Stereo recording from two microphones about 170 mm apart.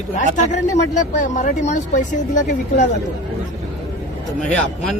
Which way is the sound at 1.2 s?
50° left (ahead or behind).